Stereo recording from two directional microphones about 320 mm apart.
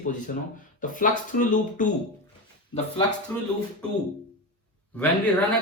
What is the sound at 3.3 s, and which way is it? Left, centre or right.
Speech, centre.